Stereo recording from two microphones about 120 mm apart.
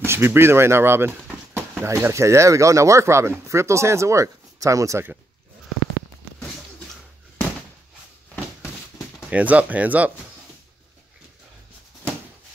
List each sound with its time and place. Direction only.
0.0 s speech: 20° right (ahead or behind)
9.3 s speech: 10° right (ahead or behind)